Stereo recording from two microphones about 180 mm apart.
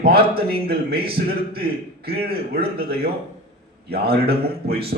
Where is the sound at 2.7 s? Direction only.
60° right (ahead or behind).